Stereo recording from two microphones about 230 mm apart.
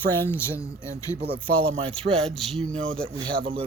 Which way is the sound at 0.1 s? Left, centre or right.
Centre.